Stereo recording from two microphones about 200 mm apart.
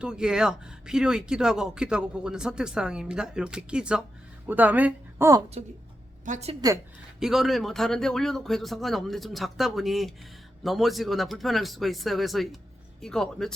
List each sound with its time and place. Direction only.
0.0 s speech: 5° right (ahead or behind)
6.2 s a woman's voice: 35° right (ahead or behind)
7.2 s speech: centre (ahead or behind)